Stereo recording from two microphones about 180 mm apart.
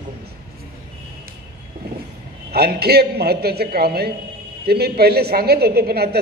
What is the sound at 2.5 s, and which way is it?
A woman's voice, 60° right (ahead or behind).